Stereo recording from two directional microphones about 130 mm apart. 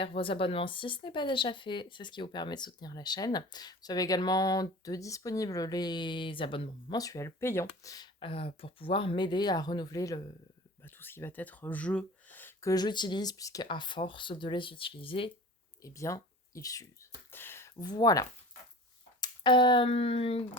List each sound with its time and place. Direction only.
0.0 s speech: 45° left (ahead or behind)
6.9 s speech: 25° left (ahead or behind)
8.2 s speech: 45° left (ahead or behind); by 10.2 s 25° left (ahead or behind)
10.8 s a sound: 15° left (ahead or behind)
12.7 s speech: 35° left (ahead or behind)
15.8 s speech: 25° left (ahead or behind)
17.3 s a sound: 20° left (ahead or behind)
17.8 s speech: 30° left (ahead or behind)
19.2 s a sound: 35° left (ahead or behind)